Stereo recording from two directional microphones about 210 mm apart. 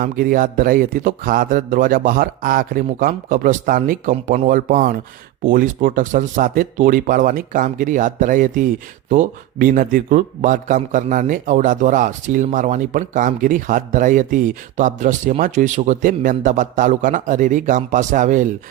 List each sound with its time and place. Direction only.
0.0 s a man's voice: 40° right (ahead or behind)